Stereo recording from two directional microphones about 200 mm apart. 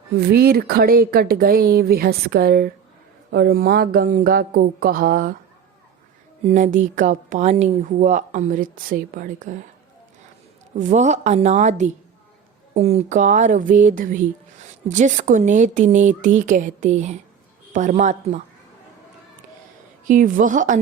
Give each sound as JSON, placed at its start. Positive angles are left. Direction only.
{"t": 0.3, "sound": "speech", "side_deg": -50}
{"t": 6.4, "sound": "a woman's voice", "side_deg": -40}
{"t": 10.8, "sound": "a woman's voice", "side_deg": -35}
{"t": 20.1, "sound": "a woman's voice", "side_deg": -40}